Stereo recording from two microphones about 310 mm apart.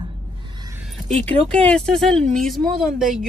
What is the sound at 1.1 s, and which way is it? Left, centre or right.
Speech, centre.